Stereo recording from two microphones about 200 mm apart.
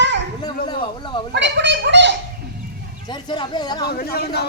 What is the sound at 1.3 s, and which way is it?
Gargling, 60° right (ahead or behind).